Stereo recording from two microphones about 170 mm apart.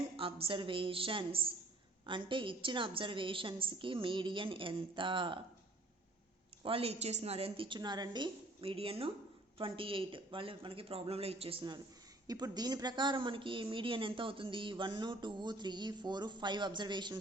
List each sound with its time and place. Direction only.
0.2 s a woman's voice: 30° right (ahead or behind)
6.6 s a woman's voice: 35° right (ahead or behind)